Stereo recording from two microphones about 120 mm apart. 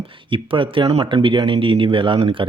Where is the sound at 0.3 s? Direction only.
45° right (ahead or behind).